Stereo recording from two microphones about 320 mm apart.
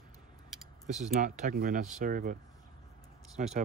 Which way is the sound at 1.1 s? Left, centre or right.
Right.